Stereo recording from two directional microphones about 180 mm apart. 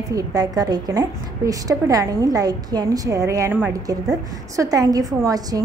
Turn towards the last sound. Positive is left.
turn(degrees=-20)  # may be behind; listen again after turning